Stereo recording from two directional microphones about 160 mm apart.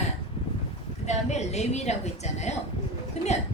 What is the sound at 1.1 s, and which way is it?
A woman's voice, 45° left (ahead or behind).